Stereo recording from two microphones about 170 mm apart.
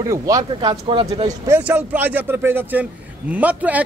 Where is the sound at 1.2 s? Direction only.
20° right (ahead or behind).